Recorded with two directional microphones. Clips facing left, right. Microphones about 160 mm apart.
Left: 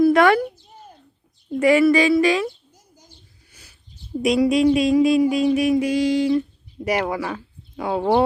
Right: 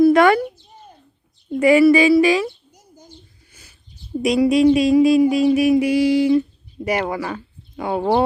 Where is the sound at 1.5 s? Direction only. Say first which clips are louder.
Right 3 dB; centre (ahead or behind).